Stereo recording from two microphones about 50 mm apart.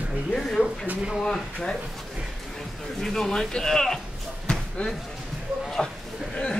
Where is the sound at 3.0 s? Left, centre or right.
Centre.